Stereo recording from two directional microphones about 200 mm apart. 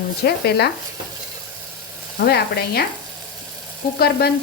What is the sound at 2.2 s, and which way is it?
Speech, 55° left (ahead or behind).